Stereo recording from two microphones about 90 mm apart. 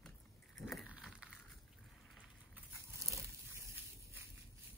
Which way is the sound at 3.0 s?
35° right (ahead or behind).